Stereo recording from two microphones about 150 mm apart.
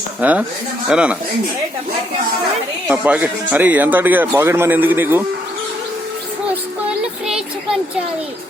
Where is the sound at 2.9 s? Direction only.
10° right (ahead or behind).